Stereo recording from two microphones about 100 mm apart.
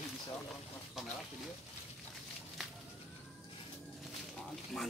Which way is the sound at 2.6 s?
Centre (ahead or behind).